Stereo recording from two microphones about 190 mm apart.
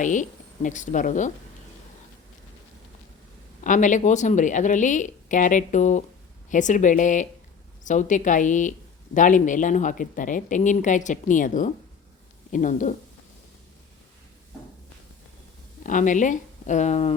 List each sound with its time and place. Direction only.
0.0 s a woman's voice: 40° left (ahead or behind)
3.6 s a woman's voice: 40° left (ahead or behind)
15.8 s speech: 40° left (ahead or behind)